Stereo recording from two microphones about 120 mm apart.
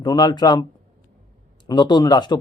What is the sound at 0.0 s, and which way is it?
Speech, 35° left (ahead or behind).